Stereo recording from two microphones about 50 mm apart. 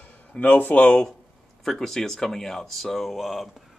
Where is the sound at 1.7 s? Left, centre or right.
Centre.